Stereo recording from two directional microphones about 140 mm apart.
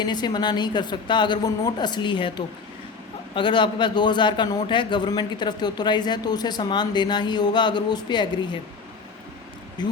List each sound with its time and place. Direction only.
0.0 s a man's voice: 30° left (ahead or behind)
3.3 s a man's voice: 35° left (ahead or behind)
9.8 s speech: 30° left (ahead or behind)